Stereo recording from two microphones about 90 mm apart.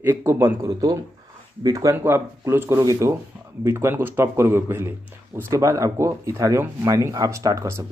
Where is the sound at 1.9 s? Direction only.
25° right (ahead or behind).